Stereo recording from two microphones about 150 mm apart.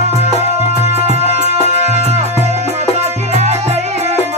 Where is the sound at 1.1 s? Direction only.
45° right (ahead or behind).